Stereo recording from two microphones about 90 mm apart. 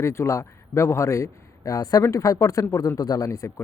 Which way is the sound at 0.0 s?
35° left (ahead or behind).